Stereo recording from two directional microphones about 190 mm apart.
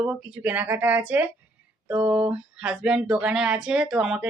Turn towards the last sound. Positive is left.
turn(degrees=-5)  # may be behind; listen again after turning